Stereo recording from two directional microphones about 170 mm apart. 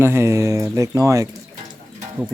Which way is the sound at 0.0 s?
15° right (ahead or behind).